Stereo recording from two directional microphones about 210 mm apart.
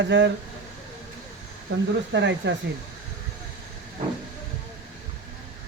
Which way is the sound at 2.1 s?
55° right (ahead or behind).